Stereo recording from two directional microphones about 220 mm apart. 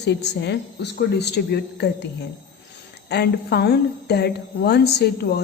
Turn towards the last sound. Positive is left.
turn(degrees=45)  # may be behind; listen again after turning